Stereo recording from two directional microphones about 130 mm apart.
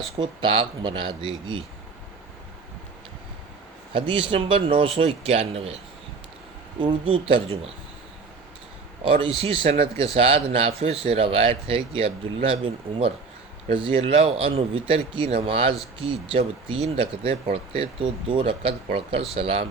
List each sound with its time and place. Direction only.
0.2 s speech: 40° right (ahead or behind)
3.9 s speech: 40° right (ahead or behind)
6.7 s speech: 40° right (ahead or behind)
9.0 s speech: 40° right (ahead or behind)